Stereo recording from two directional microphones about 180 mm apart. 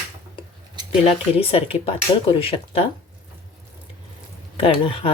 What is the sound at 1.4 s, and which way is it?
Speech, 30° left (ahead or behind).